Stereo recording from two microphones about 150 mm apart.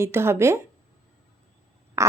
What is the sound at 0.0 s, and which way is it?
Speech, 15° right (ahead or behind).